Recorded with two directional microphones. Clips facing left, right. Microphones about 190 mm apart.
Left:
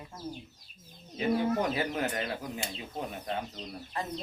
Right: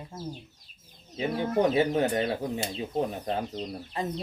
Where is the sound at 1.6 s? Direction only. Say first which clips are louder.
Right 7 dB; 25° right (ahead or behind).